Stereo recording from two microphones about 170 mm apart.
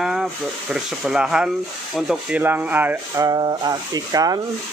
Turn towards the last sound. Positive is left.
turn(degrees=-20)  # may be behind; listen again after turning